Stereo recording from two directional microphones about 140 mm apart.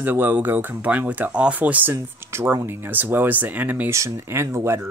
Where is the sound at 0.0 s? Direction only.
15° right (ahead or behind).